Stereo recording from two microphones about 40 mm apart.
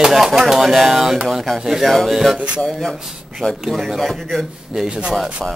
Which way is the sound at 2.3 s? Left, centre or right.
Right.